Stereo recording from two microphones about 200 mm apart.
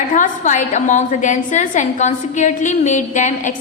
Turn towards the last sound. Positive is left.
turn(degrees=40)  # may be behind; listen again after turning